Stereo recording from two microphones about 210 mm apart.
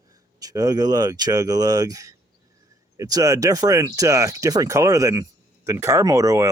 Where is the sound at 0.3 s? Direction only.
15° right (ahead or behind).